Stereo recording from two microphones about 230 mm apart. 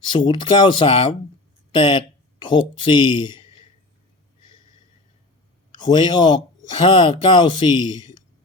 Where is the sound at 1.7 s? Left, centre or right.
Left.